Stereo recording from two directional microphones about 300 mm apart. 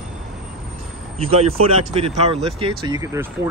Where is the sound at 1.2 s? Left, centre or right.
Centre.